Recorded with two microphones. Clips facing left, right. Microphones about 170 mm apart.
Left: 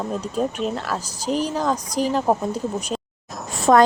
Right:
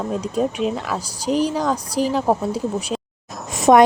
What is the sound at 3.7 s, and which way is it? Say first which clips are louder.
Speech: right 3 dB; 20° right (ahead or behind).